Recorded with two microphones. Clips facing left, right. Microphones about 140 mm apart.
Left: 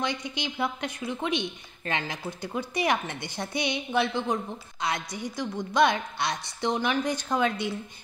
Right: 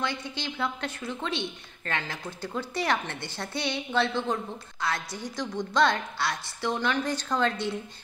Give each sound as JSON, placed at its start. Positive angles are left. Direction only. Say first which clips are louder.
{"t": 0.0, "sound": "a woman's voice", "louder": "left 1 dB", "side_deg": 15}